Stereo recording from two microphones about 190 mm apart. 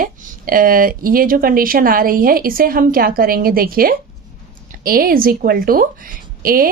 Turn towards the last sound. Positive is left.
turn(degrees=-50)  # may be behind; listen again after turning